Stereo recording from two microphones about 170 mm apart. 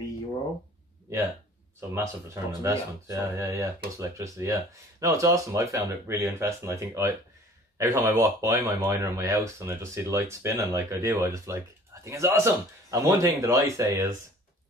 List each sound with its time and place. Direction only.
1.8 s speech: 15° right (ahead or behind)